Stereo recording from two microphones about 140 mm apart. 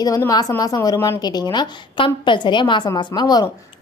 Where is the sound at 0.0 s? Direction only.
25° left (ahead or behind).